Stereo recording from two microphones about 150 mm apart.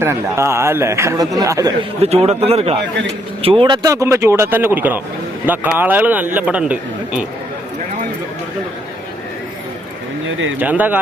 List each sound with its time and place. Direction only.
0.0 s a man's voice: 15° right (ahead or behind)
2.0 s a man's voice: 40° right (ahead or behind)
3.8 s a man's voice: 20° right (ahead or behind)
10.6 s a man's voice: 10° right (ahead or behind)